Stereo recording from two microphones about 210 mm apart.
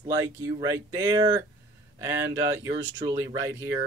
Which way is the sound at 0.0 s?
15° right (ahead or behind).